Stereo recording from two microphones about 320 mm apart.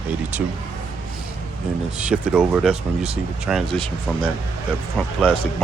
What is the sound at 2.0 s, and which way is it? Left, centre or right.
Speech, centre.